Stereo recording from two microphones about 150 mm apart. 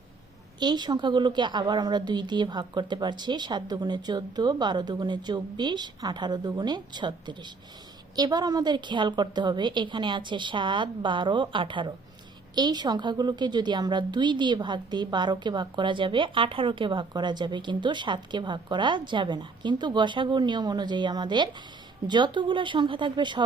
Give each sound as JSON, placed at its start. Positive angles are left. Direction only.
{"t": 0.6, "sound": "a woman's voice", "side_deg": -30}